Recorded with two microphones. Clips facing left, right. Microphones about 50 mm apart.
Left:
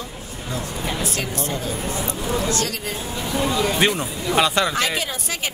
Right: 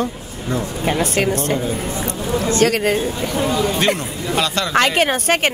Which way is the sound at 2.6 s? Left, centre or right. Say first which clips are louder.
Right 11 dB; right.